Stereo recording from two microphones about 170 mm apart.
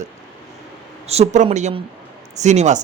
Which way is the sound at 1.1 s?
40° right (ahead or behind).